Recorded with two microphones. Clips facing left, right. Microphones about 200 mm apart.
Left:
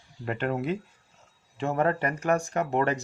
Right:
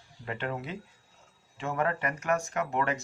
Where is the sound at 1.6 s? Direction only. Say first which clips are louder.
Left 5 dB; 35° left (ahead or behind).